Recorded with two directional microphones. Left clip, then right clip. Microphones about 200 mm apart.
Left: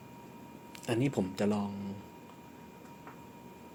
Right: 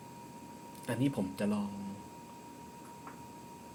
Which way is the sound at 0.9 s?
30° left (ahead or behind).